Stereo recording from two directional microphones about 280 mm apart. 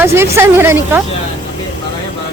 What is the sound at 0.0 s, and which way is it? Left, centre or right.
A woman's voice, centre.